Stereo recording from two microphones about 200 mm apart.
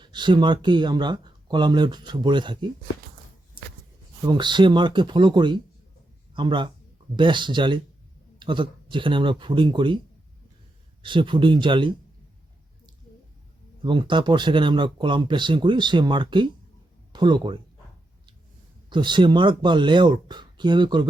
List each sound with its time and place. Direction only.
0.0 s speech: 20° right (ahead or behind)
4.3 s speech: 25° right (ahead or behind)
11.0 s speech: 25° right (ahead or behind)
13.8 s speech: 25° right (ahead or behind)
18.9 s speech: 25° right (ahead or behind)